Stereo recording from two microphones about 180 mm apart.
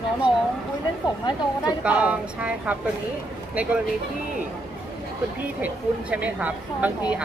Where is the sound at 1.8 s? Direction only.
5° right (ahead or behind).